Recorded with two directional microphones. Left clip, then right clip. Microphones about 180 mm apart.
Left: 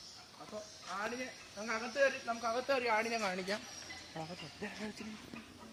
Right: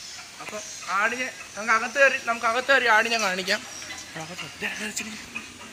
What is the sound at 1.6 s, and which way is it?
Speech, 5° right (ahead or behind).